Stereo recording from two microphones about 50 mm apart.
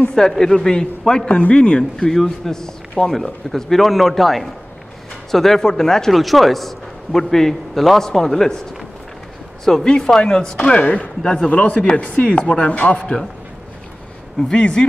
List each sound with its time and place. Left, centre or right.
0.1 s a man's voice: centre
2.0 s a man's voice: centre
9.7 s a man's voice: centre
14.5 s speech: centre